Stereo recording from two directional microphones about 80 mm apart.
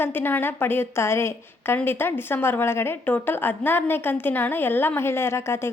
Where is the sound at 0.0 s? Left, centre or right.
Left.